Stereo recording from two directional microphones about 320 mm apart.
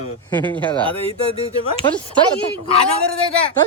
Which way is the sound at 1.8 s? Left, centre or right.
Centre.